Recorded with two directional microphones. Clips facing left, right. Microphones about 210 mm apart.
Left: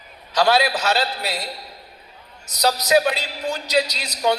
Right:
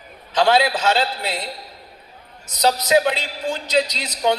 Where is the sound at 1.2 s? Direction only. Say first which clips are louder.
Right 1 dB; 10° left (ahead or behind).